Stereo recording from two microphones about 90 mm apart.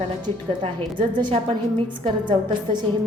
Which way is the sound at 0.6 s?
60° right (ahead or behind).